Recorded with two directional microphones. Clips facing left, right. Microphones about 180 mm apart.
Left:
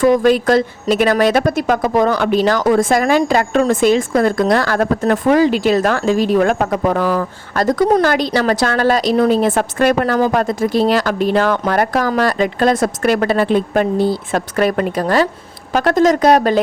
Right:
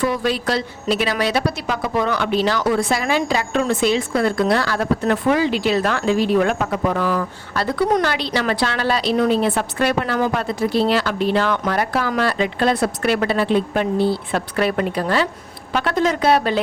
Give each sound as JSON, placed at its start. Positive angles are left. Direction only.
{"t": 0.0, "sound": "speech", "side_deg": 50}